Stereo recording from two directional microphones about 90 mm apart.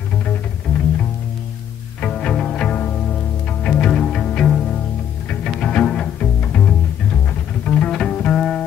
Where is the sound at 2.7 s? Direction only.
20° left (ahead or behind).